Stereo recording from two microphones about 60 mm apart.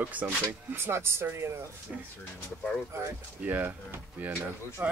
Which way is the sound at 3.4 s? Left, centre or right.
Right.